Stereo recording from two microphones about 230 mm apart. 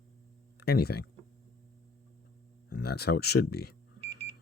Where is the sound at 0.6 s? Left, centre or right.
Left.